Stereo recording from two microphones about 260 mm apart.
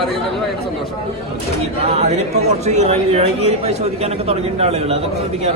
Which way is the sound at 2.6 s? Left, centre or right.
Right.